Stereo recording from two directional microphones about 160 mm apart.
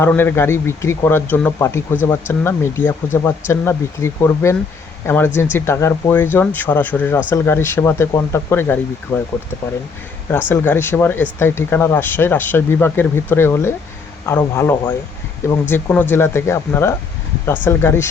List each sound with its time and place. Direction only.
0.0 s speech: 10° left (ahead or behind)
10.3 s speech: 15° left (ahead or behind)